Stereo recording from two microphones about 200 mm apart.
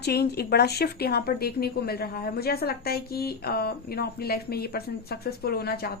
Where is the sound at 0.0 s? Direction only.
55° left (ahead or behind).